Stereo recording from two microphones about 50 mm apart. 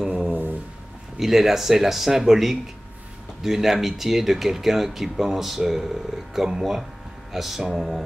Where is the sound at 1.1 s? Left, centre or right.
Centre.